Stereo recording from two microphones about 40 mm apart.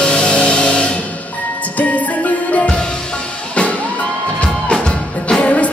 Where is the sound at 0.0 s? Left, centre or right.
Left.